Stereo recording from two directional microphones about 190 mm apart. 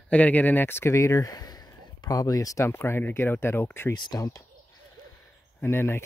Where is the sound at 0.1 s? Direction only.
10° left (ahead or behind).